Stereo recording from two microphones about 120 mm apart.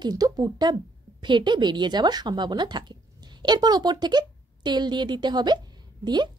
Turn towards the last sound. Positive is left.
turn(degrees=-35)  # may be behind; listen again after turning